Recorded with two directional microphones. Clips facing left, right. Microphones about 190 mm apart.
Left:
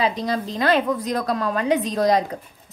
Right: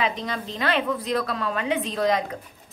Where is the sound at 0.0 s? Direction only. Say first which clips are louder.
Left 5 dB; 35° left (ahead or behind).